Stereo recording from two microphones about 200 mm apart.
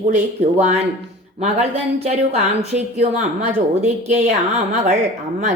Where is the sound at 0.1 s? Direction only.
35° right (ahead or behind).